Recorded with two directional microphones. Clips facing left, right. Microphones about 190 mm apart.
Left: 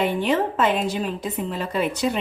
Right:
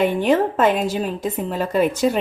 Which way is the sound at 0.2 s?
50° right (ahead or behind).